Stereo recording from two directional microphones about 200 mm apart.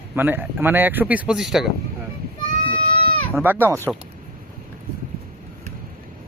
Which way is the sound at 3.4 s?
10° right (ahead or behind).